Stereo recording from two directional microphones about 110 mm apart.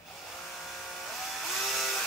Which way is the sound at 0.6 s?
5° left (ahead or behind).